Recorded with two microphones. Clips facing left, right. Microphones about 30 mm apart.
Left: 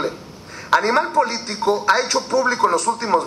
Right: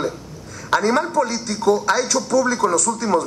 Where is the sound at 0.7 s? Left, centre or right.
Left.